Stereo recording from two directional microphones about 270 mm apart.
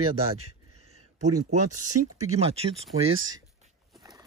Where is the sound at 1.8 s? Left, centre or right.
Right.